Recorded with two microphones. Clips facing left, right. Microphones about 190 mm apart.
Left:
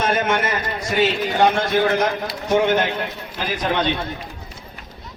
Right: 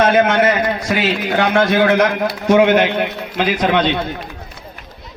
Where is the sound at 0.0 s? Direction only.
75° right (ahead or behind); by 3.9 s 90° right.